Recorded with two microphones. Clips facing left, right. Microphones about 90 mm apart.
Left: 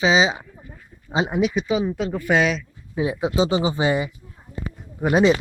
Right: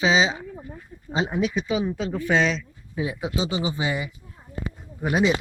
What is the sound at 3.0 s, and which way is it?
Speech, 25° left (ahead or behind).